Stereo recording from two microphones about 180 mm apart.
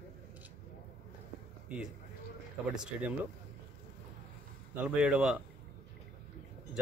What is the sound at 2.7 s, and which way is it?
Speech, 5° right (ahead or behind).